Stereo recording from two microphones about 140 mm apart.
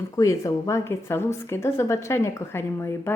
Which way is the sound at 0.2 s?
25° left (ahead or behind).